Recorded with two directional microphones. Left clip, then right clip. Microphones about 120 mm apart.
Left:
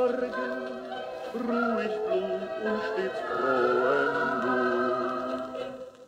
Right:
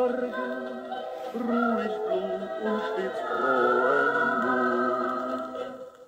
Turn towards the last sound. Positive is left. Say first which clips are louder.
# right 1 dB
turn(degrees=5)  # may be behind; listen again after turning